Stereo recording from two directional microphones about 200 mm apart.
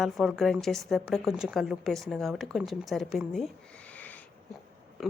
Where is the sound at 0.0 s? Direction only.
Centre (ahead or behind).